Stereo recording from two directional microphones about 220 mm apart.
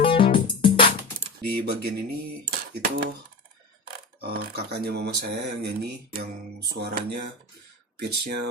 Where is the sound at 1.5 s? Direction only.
45° right (ahead or behind).